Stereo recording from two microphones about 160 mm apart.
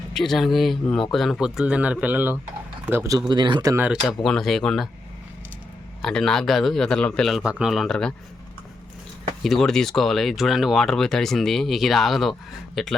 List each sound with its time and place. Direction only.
0.1 s speech: centre (ahead or behind); by 3.8 s 25° right (ahead or behind)
4.0 s speech: centre (ahead or behind)
6.0 s speech: 5° left (ahead or behind)
9.4 s speech: centre (ahead or behind)